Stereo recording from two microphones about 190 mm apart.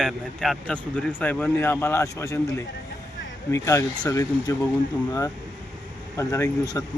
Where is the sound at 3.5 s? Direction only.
15° left (ahead or behind).